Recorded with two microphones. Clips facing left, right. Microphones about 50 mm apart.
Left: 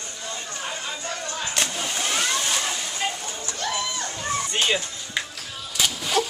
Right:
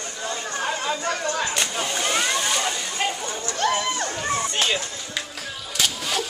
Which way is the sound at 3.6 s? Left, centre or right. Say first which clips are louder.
Right 7 dB; right.